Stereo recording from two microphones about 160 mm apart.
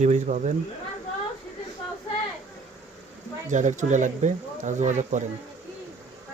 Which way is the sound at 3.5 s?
50° right (ahead or behind).